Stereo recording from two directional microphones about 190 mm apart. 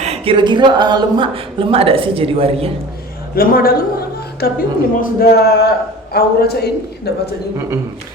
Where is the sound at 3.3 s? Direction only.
50° left (ahead or behind).